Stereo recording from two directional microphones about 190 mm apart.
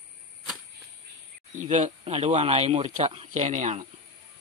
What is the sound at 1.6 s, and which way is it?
Speech, 40° right (ahead or behind).